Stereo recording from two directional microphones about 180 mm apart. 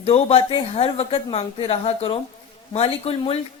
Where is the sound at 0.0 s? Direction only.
35° left (ahead or behind).